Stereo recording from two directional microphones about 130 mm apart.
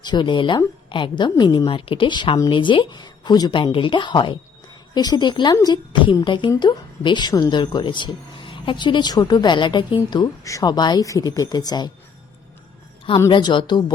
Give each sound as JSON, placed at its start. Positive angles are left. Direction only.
{"t": 0.0, "sound": "speech", "side_deg": 35}
{"t": 13.3, "sound": "speech", "side_deg": 40}